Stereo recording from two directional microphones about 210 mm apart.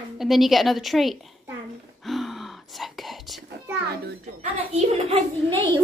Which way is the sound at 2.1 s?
Centre (ahead or behind).